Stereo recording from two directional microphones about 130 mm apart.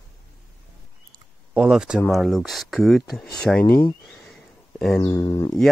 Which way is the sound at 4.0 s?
Centre (ahead or behind).